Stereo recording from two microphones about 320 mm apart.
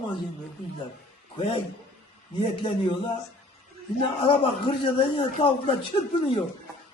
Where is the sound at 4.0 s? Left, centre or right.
Centre.